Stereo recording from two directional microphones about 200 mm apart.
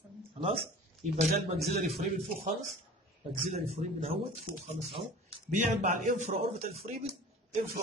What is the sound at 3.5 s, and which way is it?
Speech, 30° right (ahead or behind).